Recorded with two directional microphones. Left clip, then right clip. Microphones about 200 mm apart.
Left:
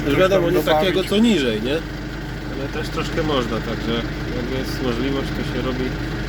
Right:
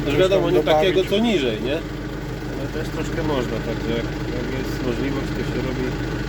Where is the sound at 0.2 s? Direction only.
35° left (ahead or behind).